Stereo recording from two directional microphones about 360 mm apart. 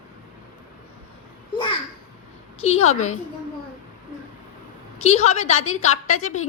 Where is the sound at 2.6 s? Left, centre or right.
Centre.